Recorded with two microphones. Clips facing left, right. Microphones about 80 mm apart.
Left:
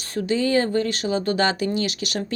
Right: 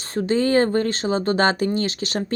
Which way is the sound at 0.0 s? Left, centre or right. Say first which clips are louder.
Right 2 dB; right.